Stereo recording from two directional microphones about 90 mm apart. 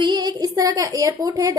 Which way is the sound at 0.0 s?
45° right (ahead or behind).